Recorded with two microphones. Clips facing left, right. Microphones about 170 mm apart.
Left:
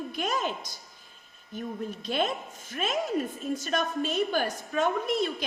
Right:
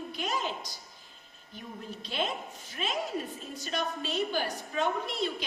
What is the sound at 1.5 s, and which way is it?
A woman's voice, 45° left (ahead or behind).